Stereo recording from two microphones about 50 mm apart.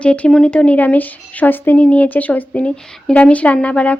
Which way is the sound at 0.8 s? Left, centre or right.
Left.